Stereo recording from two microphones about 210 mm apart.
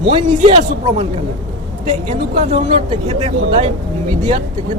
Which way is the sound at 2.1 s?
35° right (ahead or behind).